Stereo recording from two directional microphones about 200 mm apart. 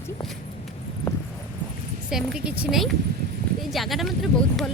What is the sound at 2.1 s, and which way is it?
A woman's voice, centre (ahead or behind).